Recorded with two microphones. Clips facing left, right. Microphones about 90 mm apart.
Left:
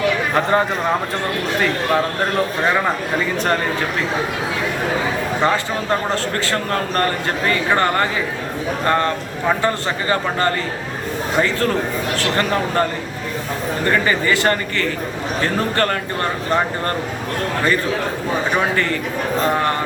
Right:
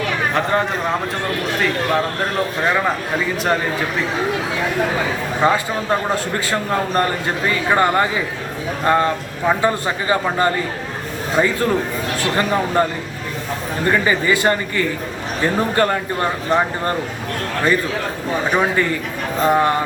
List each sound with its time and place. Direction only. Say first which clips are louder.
0.3 s speech: left 1 dB; 5° left (ahead or behind)
5.4 s a man's voice: right 3 dB; 10° right (ahead or behind)
13.8 s a man's voice: right 1 dB; 15° right (ahead or behind)
19.4 s a man's voice: right 4 dB; 15° right (ahead or behind)